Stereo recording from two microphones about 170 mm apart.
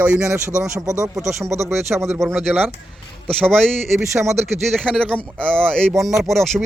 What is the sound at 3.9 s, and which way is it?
Speech, 15° right (ahead or behind).